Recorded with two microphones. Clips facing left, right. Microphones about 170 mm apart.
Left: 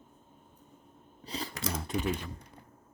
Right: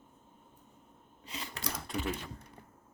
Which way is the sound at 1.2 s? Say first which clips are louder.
Left 6 dB; 35° left (ahead or behind).